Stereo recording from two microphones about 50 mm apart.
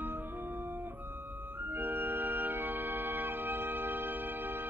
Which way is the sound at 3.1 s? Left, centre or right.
Right.